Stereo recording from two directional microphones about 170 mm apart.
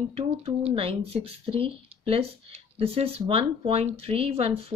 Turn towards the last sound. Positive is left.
turn(degrees=-35)  # may be behind; listen again after turning